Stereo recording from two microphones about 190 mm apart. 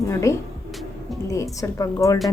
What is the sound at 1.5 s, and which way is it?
Speech, 15° left (ahead or behind).